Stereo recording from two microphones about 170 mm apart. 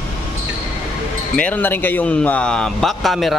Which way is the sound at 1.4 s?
10° left (ahead or behind).